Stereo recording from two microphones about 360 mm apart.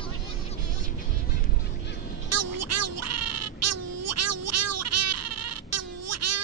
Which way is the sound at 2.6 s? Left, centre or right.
Right.